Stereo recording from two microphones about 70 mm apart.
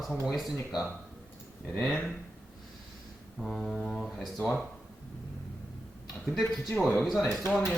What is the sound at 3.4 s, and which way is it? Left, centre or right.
Speech, centre.